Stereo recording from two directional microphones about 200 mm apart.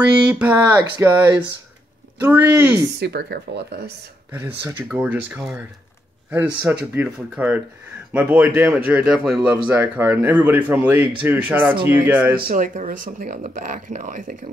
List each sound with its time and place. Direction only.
0.3 s speech: 5° right (ahead or behind)
3.0 s speech: 55° right (ahead or behind)
4.3 s speech: 15° right (ahead or behind)
12.4 s speech: 40° right (ahead or behind)